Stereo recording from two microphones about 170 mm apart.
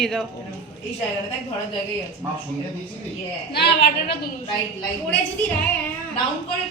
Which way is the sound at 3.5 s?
75° left (ahead or behind).